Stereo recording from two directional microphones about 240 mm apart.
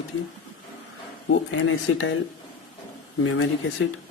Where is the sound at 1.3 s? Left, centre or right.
Left.